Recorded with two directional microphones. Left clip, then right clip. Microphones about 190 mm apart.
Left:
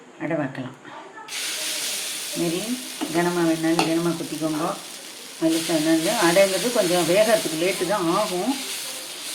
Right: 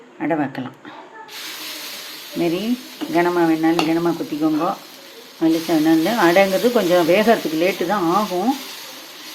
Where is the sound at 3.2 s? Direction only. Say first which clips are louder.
Right 5 dB; 60° right (ahead or behind).